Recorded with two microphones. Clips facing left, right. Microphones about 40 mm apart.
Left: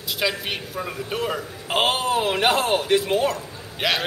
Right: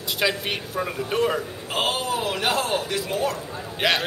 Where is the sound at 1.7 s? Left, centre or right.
Left.